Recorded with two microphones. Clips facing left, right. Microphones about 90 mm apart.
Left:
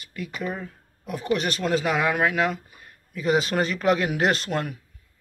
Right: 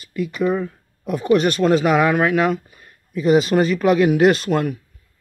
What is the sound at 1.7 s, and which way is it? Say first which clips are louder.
Speech: right 6 dB; 90° right.